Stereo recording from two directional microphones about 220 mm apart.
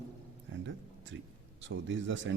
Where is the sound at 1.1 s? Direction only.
60° right (ahead or behind).